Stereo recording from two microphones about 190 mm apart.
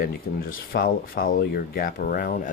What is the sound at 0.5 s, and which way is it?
Speech, 50° left (ahead or behind).